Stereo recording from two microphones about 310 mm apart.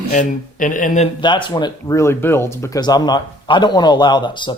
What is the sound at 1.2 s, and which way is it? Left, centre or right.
Speech, centre.